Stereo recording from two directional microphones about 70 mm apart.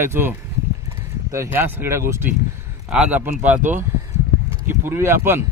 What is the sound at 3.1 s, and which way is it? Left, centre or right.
Speech, right.